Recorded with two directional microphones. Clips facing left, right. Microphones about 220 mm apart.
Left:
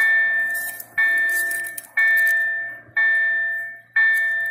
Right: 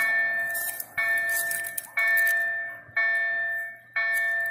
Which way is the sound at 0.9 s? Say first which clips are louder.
Left 3 dB; 45° right (ahead or behind).